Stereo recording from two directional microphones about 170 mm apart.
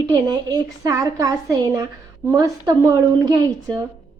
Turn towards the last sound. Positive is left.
turn(degrees=-20)  # may be behind; listen again after turning